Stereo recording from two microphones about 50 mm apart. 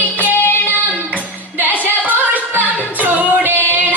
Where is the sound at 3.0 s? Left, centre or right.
Right.